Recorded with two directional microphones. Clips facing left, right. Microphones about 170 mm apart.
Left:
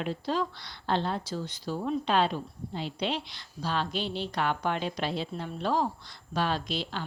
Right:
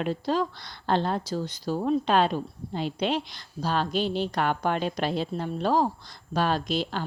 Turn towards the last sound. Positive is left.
turn(degrees=-45)  # may be behind; listen again after turning